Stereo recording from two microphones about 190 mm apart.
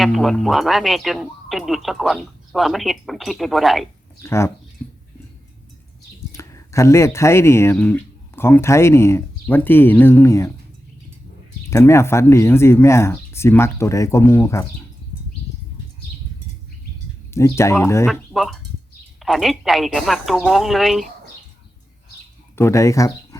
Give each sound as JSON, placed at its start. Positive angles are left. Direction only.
{"t": 0.0, "sound": "speech", "side_deg": 0}
{"t": 4.2, "sound": "speech", "side_deg": 15}
{"t": 6.3, "sound": "speech", "side_deg": 15}
{"t": 11.7, "sound": "speech", "side_deg": 15}
{"t": 17.3, "sound": "speech", "side_deg": 15}
{"t": 18.0, "sound": "speech", "side_deg": 0}
{"t": 22.5, "sound": "speech", "side_deg": 15}